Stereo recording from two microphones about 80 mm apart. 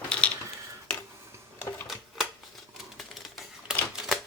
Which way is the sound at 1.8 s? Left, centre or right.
Centre.